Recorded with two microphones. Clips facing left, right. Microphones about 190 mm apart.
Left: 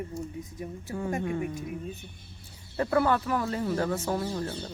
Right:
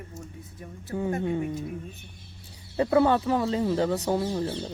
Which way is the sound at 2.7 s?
20° right (ahead or behind).